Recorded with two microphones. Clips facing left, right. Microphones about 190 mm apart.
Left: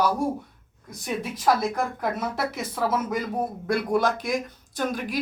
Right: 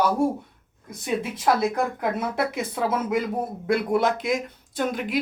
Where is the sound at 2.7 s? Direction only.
60° right (ahead or behind).